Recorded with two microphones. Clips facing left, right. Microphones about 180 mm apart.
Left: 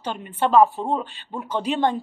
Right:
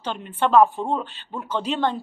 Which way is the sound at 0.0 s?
10° left (ahead or behind).